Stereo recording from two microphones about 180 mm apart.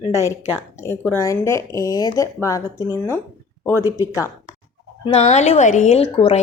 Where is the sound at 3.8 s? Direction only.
15° right (ahead or behind).